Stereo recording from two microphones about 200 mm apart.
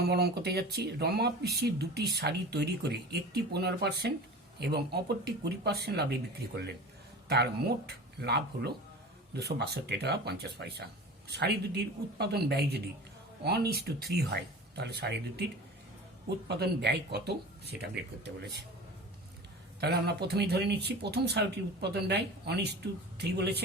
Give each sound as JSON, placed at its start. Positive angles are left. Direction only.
{"t": 0.0, "sound": "speech", "side_deg": -55}
{"t": 7.9, "sound": "speech", "side_deg": -55}
{"t": 16.5, "sound": "speech", "side_deg": -55}
{"t": 19.8, "sound": "speech", "side_deg": -55}